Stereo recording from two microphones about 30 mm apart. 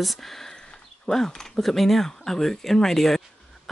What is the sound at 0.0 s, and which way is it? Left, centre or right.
Speech, centre.